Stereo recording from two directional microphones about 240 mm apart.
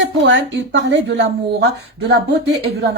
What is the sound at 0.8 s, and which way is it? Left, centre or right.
Speech, right.